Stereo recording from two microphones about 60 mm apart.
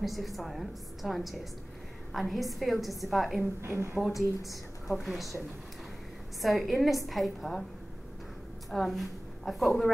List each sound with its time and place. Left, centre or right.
0.0 s a woman's voice: centre
3.3 s a woman's voice: right
4.8 s a woman's voice: centre
6.4 s a woman's voice: centre
8.6 s a woman's voice: centre